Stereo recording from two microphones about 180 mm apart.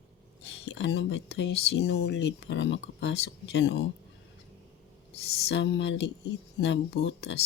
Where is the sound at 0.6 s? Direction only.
85° left.